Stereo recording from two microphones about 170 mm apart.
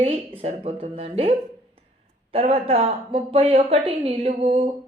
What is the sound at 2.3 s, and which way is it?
A woman's voice, 35° right (ahead or behind).